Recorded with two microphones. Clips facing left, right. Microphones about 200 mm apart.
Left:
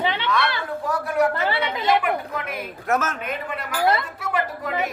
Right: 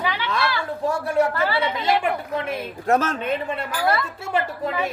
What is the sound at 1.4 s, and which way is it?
Speech, 25° left (ahead or behind).